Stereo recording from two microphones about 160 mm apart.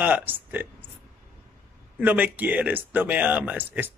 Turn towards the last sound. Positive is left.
turn(degrees=-10)  # may be behind; listen again after turning